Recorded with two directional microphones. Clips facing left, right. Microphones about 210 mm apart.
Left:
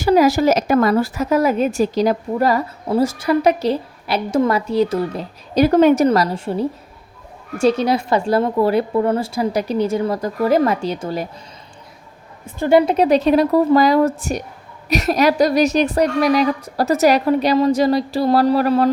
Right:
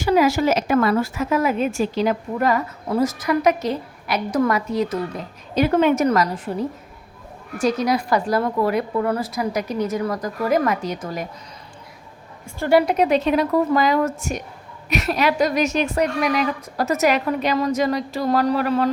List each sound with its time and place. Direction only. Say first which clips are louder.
0.0 s a woman's voice: left 4 dB; 35° left (ahead or behind)
12.5 s a woman's voice: left 3 dB; 20° left (ahead or behind); by 18.9 s 35° left (ahead or behind)